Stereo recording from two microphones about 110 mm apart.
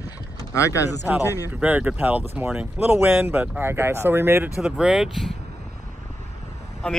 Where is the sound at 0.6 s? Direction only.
30° left (ahead or behind).